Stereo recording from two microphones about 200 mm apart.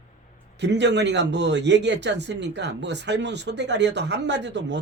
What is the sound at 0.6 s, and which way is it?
Speech, 60° right (ahead or behind).